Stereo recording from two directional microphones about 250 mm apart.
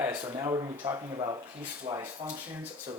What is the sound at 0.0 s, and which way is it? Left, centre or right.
Speech, centre.